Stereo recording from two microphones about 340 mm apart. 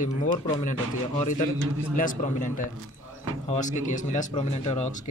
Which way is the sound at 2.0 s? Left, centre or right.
Left.